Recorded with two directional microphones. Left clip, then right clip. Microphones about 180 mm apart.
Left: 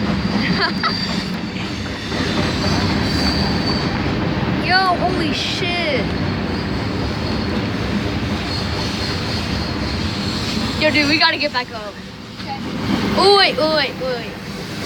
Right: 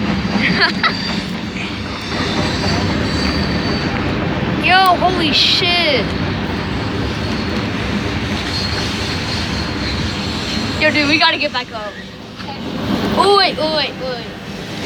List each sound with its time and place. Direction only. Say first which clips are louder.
0.4 s speech: right 6 dB; centre (ahead or behind)
4.6 s speech: right 5 dB; 5° right (ahead or behind)
10.8 s speech: right 2 dB; 15° left (ahead or behind)
13.3 s speech: even; 30° left (ahead or behind)